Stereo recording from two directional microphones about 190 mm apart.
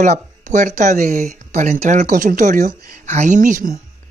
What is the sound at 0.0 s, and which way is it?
Speech, 40° right (ahead or behind).